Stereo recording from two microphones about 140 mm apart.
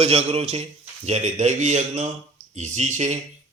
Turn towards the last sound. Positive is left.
turn(degrees=-55)  # may be behind; listen again after turning